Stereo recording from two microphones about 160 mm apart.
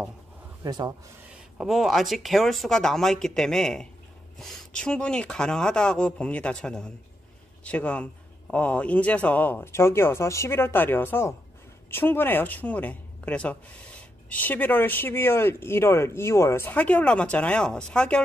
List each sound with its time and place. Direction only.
0.7 s speech: 25° right (ahead or behind)
1.6 s speech: centre (ahead or behind)